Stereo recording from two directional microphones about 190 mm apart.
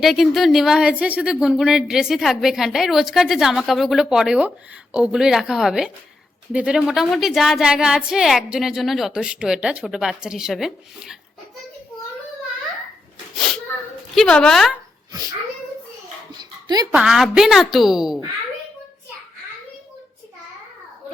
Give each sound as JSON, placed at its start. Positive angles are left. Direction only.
{"t": 0.0, "sound": "speech", "side_deg": 0}
{"t": 14.2, "sound": "speech", "side_deg": 5}
{"t": 15.1, "sound": "speech", "side_deg": -20}
{"t": 16.4, "sound": "dog", "side_deg": -20}
{"t": 16.9, "sound": "speech", "side_deg": -5}